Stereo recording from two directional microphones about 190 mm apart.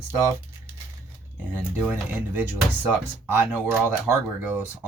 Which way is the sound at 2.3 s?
10° right (ahead or behind).